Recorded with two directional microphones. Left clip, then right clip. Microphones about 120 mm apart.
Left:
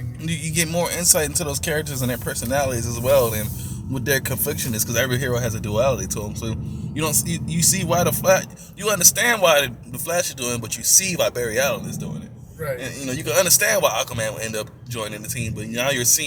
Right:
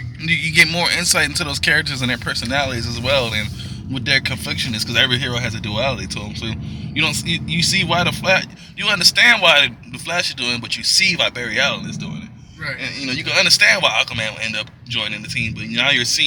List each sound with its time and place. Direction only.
0.3 s speech: 25° left (ahead or behind)
3.9 s speech: 50° left (ahead or behind)
13.1 s speech: 50° left (ahead or behind)